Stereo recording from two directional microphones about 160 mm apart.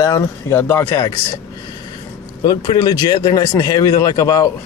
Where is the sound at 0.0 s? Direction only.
20° left (ahead or behind).